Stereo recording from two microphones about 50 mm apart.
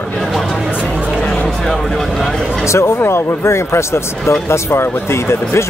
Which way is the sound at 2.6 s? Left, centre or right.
Left.